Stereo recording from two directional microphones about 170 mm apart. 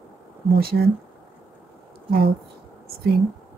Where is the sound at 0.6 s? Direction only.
65° right (ahead or behind).